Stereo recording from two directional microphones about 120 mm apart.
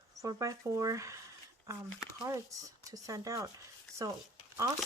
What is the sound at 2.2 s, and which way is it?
Speech, 30° right (ahead or behind).